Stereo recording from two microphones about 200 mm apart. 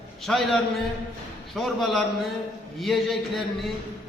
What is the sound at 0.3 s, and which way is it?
Speech, 5° left (ahead or behind).